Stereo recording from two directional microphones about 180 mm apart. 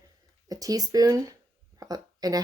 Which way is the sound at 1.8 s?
20° right (ahead or behind).